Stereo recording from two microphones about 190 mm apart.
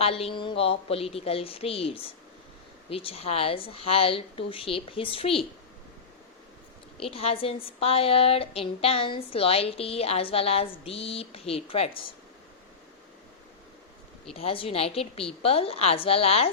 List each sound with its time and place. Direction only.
0.0 s a woman's voice: 30° left (ahead or behind)
7.0 s a woman's voice: 30° left (ahead or behind)
14.3 s a woman's voice: 30° left (ahead or behind)